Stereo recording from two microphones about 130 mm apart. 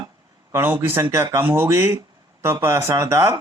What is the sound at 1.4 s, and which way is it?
Speech, 15° right (ahead or behind).